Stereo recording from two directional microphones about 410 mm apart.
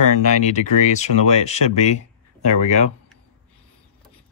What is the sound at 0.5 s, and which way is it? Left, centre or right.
Speech, centre.